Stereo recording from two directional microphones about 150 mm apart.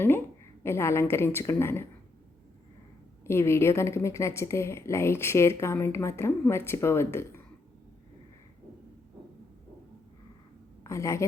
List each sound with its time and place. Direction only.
0.6 s a woman's voice: 15° left (ahead or behind)
3.2 s a woman's voice: 15° left (ahead or behind)
10.8 s a woman's voice: 20° left (ahead or behind)